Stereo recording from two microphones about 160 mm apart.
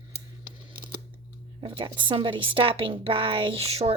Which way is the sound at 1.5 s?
35° right (ahead or behind).